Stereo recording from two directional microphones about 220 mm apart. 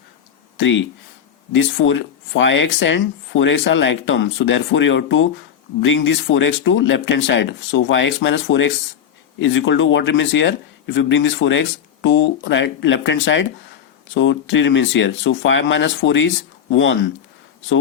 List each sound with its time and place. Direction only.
0.5 s speech: 60° left (ahead or behind)